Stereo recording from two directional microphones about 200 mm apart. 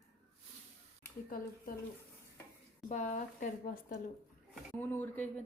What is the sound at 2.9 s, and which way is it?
Speech, 35° left (ahead or behind).